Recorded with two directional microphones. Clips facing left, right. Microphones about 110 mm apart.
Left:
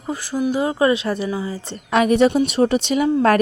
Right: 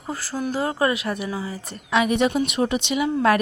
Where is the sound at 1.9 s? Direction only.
40° left (ahead or behind).